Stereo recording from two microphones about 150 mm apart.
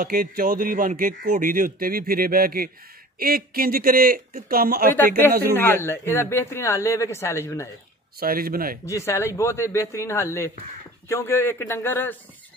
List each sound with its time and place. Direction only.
0.0 s a man's voice: 70° right (ahead or behind)
4.9 s speech: 15° left (ahead or behind)
8.2 s a man's voice: 80° right
8.8 s speech: 20° left (ahead or behind)